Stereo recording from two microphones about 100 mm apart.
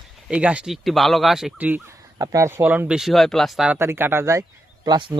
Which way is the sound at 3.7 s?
25° right (ahead or behind).